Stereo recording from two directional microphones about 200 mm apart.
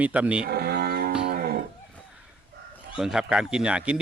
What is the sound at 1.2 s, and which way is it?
Moo, 50° right (ahead or behind).